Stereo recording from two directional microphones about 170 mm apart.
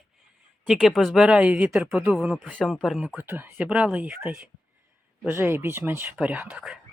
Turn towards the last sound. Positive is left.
turn(degrees=-5)  # may be behind; listen again after turning